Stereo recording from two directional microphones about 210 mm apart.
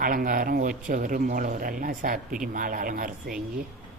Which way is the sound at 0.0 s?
45° right (ahead or behind).